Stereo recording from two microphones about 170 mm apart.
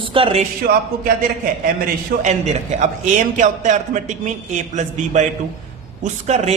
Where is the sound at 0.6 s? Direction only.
60° right (ahead or behind).